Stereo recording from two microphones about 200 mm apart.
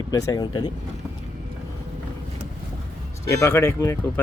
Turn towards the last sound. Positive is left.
turn(degrees=15)  # may be behind; listen again after turning